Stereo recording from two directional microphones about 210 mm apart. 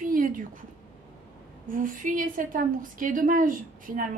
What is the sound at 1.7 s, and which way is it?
A woman's voice, 40° right (ahead or behind).